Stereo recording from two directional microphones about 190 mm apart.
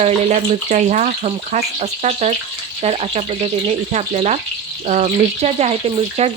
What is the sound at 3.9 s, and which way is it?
Speech, 35° right (ahead or behind).